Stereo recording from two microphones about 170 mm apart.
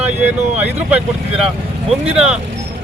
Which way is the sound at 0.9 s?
5° right (ahead or behind).